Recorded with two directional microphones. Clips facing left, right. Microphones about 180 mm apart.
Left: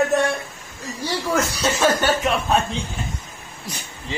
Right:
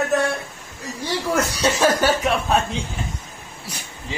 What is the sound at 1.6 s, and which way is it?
Speech, 10° right (ahead or behind).